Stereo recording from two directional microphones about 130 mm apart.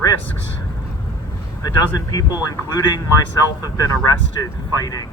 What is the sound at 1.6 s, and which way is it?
Speech, 30° left (ahead or behind).